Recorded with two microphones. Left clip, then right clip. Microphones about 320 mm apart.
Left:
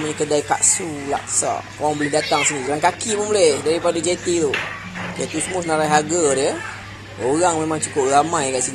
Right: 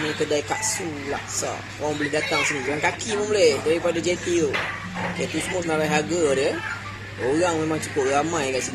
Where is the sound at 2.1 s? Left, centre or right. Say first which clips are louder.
Left 4 dB; centre.